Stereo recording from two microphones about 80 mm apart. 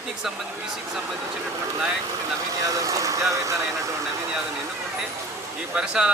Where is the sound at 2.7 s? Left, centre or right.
Right.